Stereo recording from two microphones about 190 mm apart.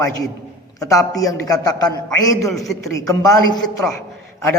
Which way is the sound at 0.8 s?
15° left (ahead or behind).